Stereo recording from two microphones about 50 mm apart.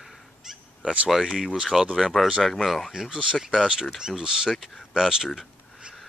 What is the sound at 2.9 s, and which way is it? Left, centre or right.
Speech, centre.